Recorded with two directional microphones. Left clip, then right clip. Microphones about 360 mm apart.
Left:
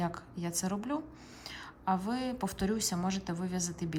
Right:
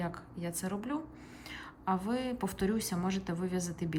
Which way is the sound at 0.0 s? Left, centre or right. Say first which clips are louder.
Left 2 dB; centre.